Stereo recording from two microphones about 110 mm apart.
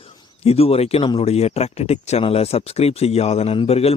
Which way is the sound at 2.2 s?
70° left (ahead or behind).